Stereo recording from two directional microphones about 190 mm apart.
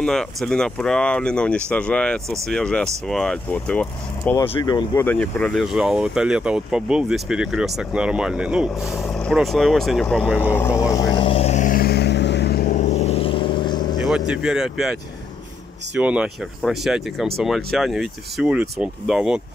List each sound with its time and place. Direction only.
0.0 s speech: 5° left (ahead or behind)
4.5 s speech: 20° left (ahead or behind)
5.0 s speech: 5° left (ahead or behind)
10.4 s vehicle: 10° left (ahead or behind); by 12.6 s 60° left (ahead or behind)
12.6 s vehicle: 40° left (ahead or behind); by 13.9 s 25° left (ahead or behind)
14.0 s speech: 5° right (ahead or behind)
16.0 s speech: 5° right (ahead or behind)